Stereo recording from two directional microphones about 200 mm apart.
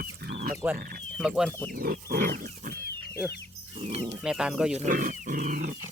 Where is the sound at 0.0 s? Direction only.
55° right (ahead or behind).